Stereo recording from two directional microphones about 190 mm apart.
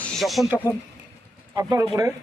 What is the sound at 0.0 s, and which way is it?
Speech, centre (ahead or behind).